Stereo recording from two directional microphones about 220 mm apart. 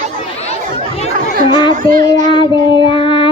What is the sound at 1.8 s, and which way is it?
Child singing, 40° right (ahead or behind).